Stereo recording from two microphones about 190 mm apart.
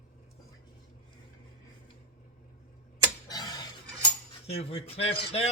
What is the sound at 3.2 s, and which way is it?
Tick-tock, 20° left (ahead or behind).